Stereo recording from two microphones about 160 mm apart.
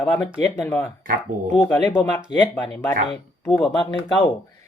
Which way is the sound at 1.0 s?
60° right (ahead or behind).